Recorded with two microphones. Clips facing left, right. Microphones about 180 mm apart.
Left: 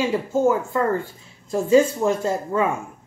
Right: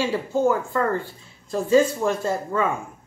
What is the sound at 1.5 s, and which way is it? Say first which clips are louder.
Speech: left 2 dB; 20° left (ahead or behind).